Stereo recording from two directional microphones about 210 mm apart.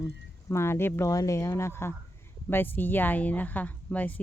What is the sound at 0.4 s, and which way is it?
A woman's voice, 10° left (ahead or behind).